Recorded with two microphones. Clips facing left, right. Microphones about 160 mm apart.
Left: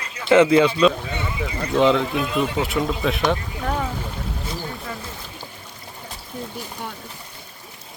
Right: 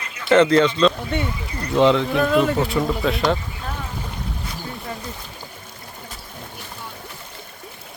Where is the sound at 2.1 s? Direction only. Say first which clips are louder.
Right 5 dB; 50° right (ahead or behind).